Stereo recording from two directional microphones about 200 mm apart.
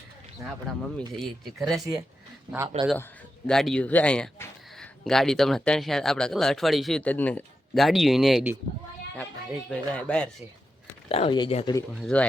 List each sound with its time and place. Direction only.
0.7 s speech: centre (ahead or behind)
9.6 s speech: 5° left (ahead or behind)
11.1 s speech: 25° left (ahead or behind)
11.9 s speech: centre (ahead or behind)